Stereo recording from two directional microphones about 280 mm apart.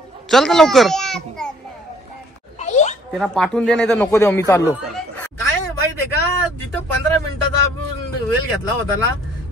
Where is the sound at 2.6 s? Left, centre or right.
Left.